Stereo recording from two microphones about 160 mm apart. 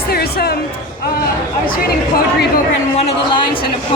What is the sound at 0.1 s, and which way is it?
Music, 75° left (ahead or behind).